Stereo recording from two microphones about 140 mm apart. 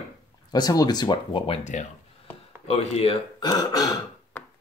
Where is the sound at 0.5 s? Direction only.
30° left (ahead or behind).